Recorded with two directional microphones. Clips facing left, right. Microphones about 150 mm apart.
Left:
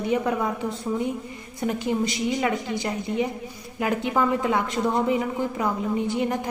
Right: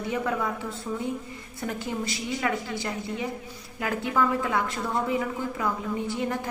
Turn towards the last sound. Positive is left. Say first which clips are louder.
# left 4 dB
turn(degrees=20)  # may be behind; listen again after turning